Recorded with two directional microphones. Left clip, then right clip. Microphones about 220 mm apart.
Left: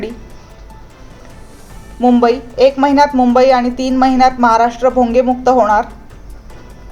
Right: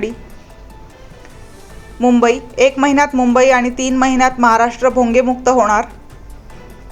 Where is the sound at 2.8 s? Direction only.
25° right (ahead or behind).